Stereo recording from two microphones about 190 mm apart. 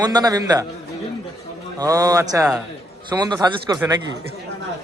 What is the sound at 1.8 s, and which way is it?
A man's voice, 20° right (ahead or behind).